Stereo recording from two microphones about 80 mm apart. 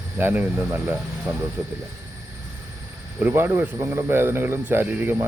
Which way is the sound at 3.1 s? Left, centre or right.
Right.